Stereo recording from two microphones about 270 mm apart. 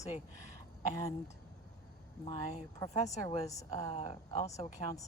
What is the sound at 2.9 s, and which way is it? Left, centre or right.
A woman's voice, left.